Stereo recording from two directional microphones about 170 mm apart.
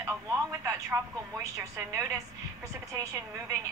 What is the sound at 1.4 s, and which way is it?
Speech, 20° right (ahead or behind).